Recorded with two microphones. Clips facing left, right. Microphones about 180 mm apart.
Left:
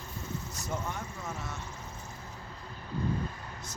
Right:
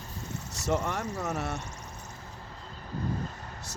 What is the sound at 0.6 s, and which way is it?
Speech, 80° right.